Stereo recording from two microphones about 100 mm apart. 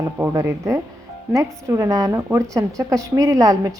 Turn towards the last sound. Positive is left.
turn(degrees=-35)  # may be behind; listen again after turning